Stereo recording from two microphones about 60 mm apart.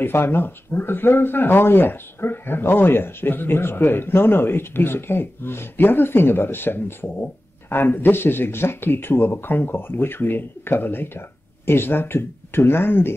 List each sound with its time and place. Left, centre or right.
0.0 s speech: left